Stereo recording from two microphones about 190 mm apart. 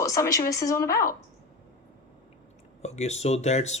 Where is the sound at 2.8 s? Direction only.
35° left (ahead or behind).